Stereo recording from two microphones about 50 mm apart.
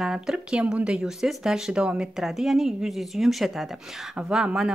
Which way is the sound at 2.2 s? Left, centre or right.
Centre.